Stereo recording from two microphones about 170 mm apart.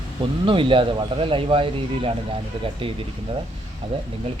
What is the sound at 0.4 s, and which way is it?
Speech, 30° right (ahead or behind).